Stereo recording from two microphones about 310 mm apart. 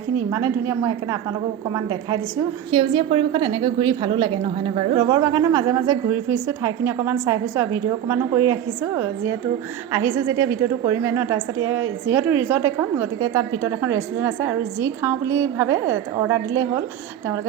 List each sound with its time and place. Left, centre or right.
0.3 s a woman's voice: centre
9.9 s a woman's voice: centre